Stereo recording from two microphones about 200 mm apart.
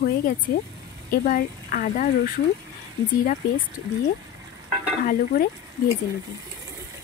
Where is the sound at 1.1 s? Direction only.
45° left (ahead or behind).